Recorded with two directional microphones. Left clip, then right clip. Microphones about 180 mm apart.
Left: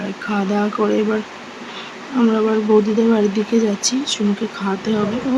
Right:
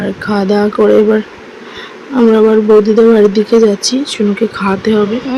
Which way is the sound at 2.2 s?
25° right (ahead or behind).